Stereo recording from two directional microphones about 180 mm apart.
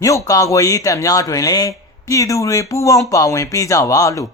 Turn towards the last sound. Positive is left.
turn(degrees=20)  # may be behind; listen again after turning